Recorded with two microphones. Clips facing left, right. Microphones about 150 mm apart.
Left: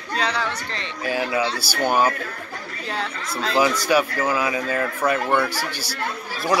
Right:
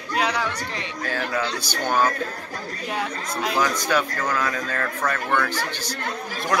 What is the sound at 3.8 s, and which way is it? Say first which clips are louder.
Speech: left 4 dB; 10° left (ahead or behind).